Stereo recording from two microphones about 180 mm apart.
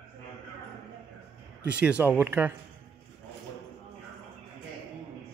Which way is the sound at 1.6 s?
5° right (ahead or behind).